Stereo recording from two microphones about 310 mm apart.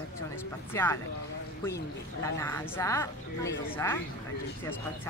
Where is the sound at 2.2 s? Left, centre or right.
Centre.